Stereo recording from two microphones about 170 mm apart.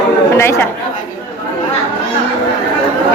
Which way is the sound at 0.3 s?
15° left (ahead or behind).